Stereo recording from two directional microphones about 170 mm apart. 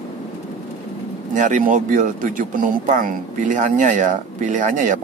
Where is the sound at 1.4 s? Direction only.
50° right (ahead or behind).